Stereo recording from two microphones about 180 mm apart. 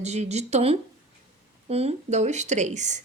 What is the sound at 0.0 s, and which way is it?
Speech, 40° right (ahead or behind).